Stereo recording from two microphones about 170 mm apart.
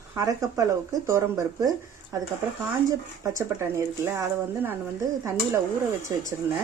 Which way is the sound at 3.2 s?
15° right (ahead or behind).